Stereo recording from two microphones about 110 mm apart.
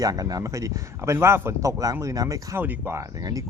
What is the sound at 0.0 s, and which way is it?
A man's voice, 35° right (ahead or behind).